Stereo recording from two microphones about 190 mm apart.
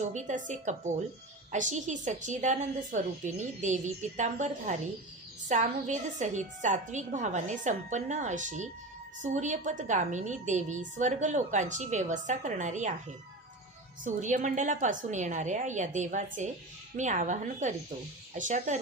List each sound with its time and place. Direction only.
0.0 s a woman's voice: 40° right (ahead or behind)
14.0 s a woman's voice: 40° right (ahead or behind)